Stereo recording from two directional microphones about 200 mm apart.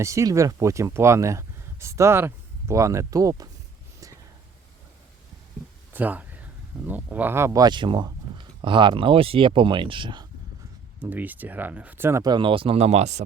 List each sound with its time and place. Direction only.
0.0 s speech: 15° right (ahead or behind)
5.9 s speech: 10° right (ahead or behind)
11.0 s speech: 10° right (ahead or behind); by 13.2 s 35° right (ahead or behind)